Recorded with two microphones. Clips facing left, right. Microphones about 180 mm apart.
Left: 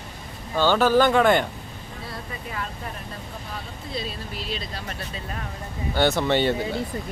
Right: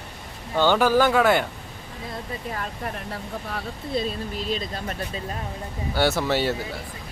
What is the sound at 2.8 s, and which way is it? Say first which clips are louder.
Speech: right 4 dB; 65° right (ahead or behind).